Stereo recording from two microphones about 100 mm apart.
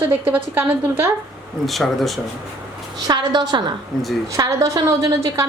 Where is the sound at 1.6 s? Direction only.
Centre (ahead or behind).